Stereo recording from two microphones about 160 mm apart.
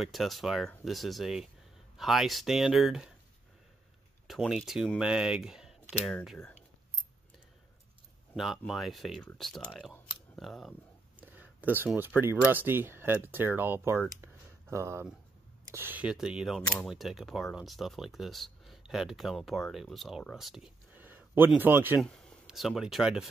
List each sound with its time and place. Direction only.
0.0 s speech: centre (ahead or behind)
4.3 s speech: centre (ahead or behind)
8.4 s speech: centre (ahead or behind)
11.1 s speech: 10° right (ahead or behind)
22.0 s speech: centre (ahead or behind)